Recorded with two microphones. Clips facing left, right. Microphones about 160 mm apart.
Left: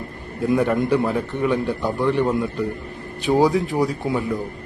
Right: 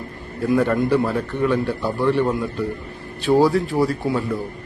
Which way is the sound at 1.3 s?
15° left (ahead or behind).